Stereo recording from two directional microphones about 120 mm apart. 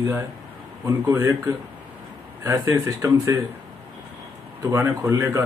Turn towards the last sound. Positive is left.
turn(degrees=-20)  # may be behind; listen again after turning